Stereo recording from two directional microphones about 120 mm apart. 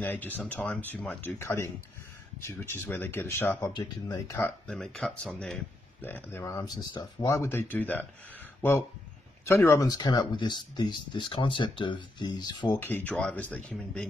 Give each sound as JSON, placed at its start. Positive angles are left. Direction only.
{"t": 0.0, "sound": "speech", "side_deg": 15}
{"t": 3.6, "sound": "speech", "side_deg": 30}
{"t": 4.6, "sound": "speech", "side_deg": 5}
{"t": 6.7, "sound": "speech", "side_deg": 35}
{"t": 7.2, "sound": "speech", "side_deg": 25}
{"t": 9.9, "sound": "speech", "side_deg": 40}
{"t": 12.7, "sound": "speech", "side_deg": 20}